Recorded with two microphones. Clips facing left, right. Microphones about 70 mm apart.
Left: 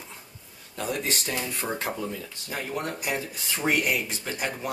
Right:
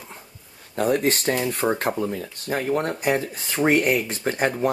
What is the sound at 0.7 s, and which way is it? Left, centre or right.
Speech, right.